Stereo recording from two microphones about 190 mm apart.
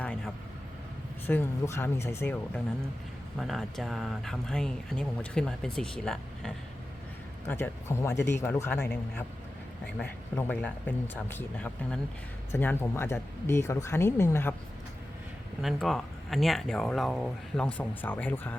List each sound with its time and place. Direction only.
1.3 s speech: 10° left (ahead or behind)
3.3 s speech: centre (ahead or behind)
7.4 s speech: 15° left (ahead or behind)
15.6 s speech: centre (ahead or behind)